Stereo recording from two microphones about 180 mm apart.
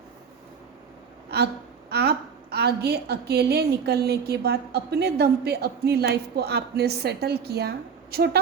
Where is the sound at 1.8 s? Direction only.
65° right (ahead or behind).